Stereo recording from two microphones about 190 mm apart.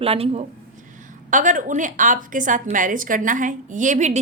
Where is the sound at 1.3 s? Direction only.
40° right (ahead or behind).